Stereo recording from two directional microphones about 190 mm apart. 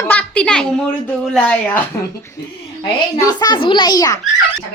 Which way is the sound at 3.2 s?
20° left (ahead or behind).